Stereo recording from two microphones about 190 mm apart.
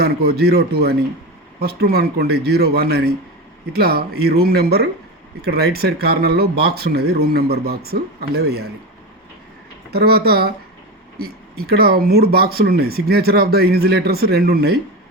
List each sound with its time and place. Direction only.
0.0 s speech: 55° right (ahead or behind)
9.9 s speech: 55° right (ahead or behind)